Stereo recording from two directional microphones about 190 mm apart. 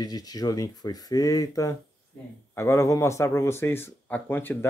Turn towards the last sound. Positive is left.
turn(degrees=10)  # may be behind; listen again after turning